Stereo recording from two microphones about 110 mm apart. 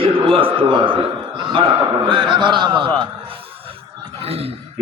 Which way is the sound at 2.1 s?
45° right (ahead or behind).